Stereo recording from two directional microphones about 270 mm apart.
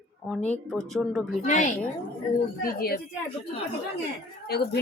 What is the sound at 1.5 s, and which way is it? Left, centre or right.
A woman's voice, left.